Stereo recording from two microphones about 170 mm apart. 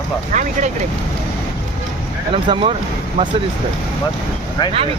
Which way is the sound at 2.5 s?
30° right (ahead or behind).